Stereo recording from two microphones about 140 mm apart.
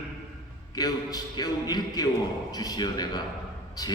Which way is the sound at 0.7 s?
30° left (ahead or behind).